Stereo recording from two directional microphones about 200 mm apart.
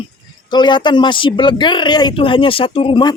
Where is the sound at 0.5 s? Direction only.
25° left (ahead or behind).